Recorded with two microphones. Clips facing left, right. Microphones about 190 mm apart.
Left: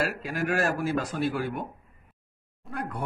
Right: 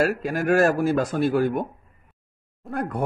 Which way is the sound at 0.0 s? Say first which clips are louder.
Right 6 dB; 45° right (ahead or behind).